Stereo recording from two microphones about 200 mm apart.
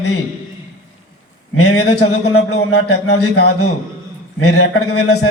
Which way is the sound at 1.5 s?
90° left.